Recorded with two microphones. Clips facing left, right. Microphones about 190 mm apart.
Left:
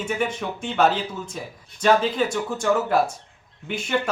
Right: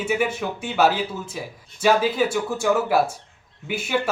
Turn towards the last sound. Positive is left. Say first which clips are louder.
# right 1 dB
turn(degrees=-5)  # may be behind; listen again after turning